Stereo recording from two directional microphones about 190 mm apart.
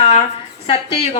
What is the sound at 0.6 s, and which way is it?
Speech, 30° left (ahead or behind).